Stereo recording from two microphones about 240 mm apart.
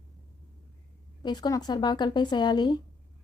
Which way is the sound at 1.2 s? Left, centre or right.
Centre.